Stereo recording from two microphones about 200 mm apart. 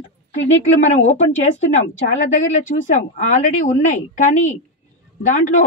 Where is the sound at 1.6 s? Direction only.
35° left (ahead or behind).